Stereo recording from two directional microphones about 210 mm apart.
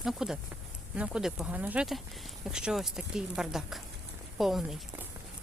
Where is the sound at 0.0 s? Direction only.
Centre (ahead or behind).